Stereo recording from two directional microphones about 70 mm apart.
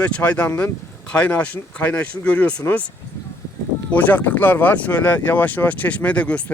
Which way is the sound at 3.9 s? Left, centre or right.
Left.